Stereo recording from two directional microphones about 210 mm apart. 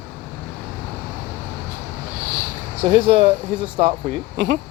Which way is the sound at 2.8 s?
25° right (ahead or behind).